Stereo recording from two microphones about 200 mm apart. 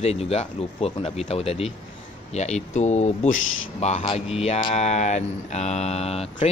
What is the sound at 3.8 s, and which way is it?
Speech, 30° left (ahead or behind).